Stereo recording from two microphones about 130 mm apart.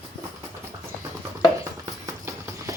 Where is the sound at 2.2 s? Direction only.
20° right (ahead or behind).